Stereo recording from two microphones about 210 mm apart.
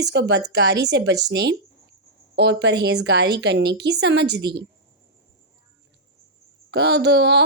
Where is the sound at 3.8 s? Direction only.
55° right (ahead or behind).